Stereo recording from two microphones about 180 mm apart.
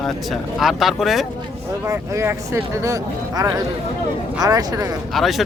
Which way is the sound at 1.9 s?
15° right (ahead or behind).